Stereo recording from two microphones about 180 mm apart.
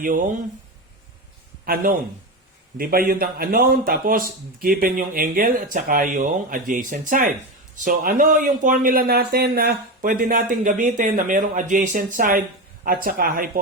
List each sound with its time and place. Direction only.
0.0 s speech: 50° right (ahead or behind)
1.6 s speech: 55° right (ahead or behind)